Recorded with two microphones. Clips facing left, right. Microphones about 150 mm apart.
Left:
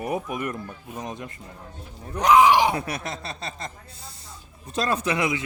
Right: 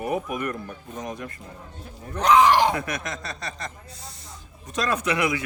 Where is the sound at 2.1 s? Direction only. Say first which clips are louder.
Left 1 dB; 10° left (ahead or behind).